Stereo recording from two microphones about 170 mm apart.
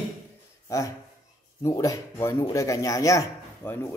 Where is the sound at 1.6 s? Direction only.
20° left (ahead or behind).